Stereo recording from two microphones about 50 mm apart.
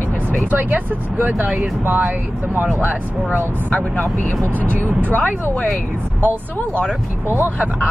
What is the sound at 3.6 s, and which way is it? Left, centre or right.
Speech, left.